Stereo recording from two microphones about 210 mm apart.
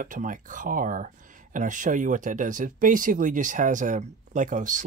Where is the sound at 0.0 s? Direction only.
40° right (ahead or behind).